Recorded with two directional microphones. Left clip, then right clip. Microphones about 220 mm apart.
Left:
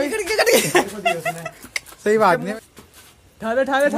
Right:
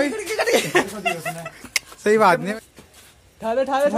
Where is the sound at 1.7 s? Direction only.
10° right (ahead or behind).